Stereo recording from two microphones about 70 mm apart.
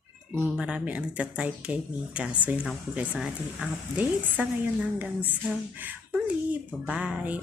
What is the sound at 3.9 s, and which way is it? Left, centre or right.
A woman's voice, right.